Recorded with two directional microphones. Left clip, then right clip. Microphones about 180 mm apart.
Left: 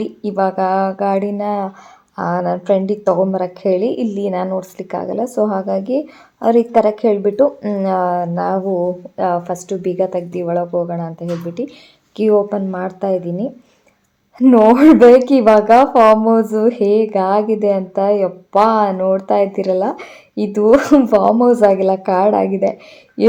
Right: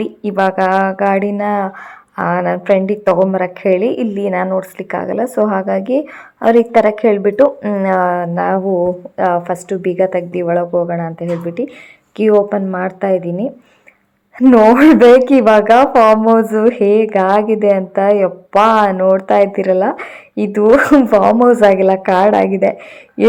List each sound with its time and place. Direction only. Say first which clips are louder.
0.4 s a woman's voice: right 3 dB; centre (ahead or behind)
9.1 s a woman's voice: right 3 dB; 5° left (ahead or behind)
15.7 s speech: even; 10° right (ahead or behind)
16.1 s a woman's voice: right 3 dB; centre (ahead or behind)